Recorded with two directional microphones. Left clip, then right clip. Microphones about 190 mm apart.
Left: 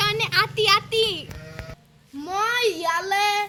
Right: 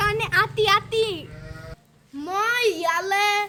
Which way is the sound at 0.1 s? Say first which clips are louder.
Even; centre (ahead or behind).